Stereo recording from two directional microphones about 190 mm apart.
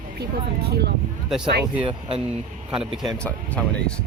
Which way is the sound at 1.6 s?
25° right (ahead or behind).